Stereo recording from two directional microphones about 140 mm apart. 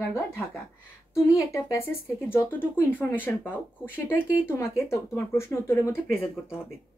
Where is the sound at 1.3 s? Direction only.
20° left (ahead or behind).